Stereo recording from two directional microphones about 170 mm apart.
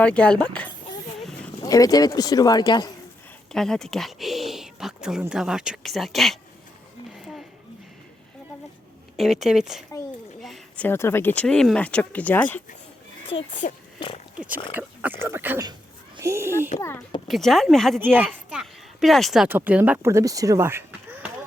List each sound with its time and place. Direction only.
0.0 s speech: 5° left (ahead or behind)
1.6 s speech: 20° left (ahead or behind)
3.5 s speech: 5° left (ahead or behind)
9.1 s speech: centre (ahead or behind)
10.4 s a sound: centre (ahead or behind)
10.8 s speech: 15° left (ahead or behind)
13.5 s speech: 45° left (ahead or behind)
14.3 s speech: 10° right (ahead or behind)
17.2 s speech: centre (ahead or behind)
18.0 s speech: 10° right (ahead or behind)